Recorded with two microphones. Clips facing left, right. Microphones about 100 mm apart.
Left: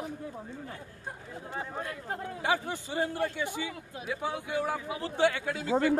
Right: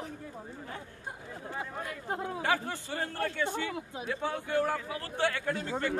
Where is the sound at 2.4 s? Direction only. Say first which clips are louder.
Left 3 dB; 15° left (ahead or behind).